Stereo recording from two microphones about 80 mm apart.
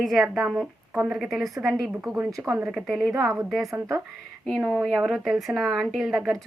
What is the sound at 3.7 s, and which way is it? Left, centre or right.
Speech, right.